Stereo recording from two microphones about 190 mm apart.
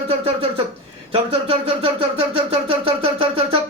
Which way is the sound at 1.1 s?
30° right (ahead or behind).